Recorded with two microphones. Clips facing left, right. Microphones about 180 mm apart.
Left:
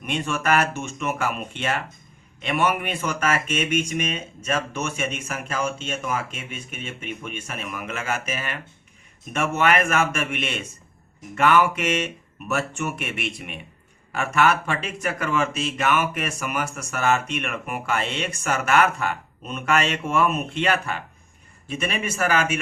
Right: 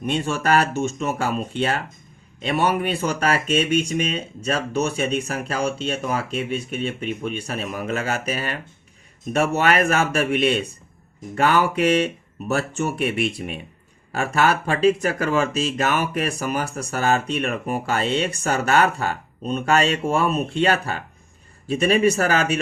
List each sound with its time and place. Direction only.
0.1 s speech: 30° right (ahead or behind)